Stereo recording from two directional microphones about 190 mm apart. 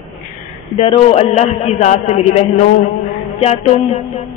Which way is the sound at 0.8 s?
30° left (ahead or behind).